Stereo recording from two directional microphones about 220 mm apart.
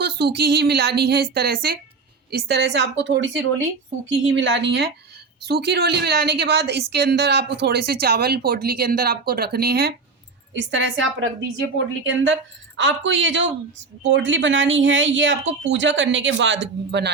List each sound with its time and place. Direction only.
0.0 s a woman's voice: 45° right (ahead or behind)
10.5 s speech: 55° right (ahead or behind)